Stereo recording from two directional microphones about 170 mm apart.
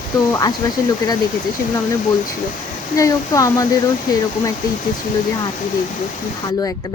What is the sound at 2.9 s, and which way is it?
Speech, 20° left (ahead or behind).